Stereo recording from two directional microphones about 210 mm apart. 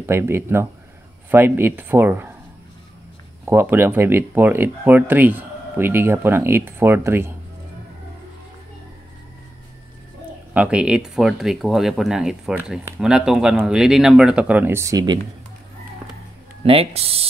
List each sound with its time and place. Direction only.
0.0 s speech: 10° right (ahead or behind)
3.4 s speech: 10° right (ahead or behind)
10.5 s speech: 5° right (ahead or behind)
16.6 s speech: 30° right (ahead or behind)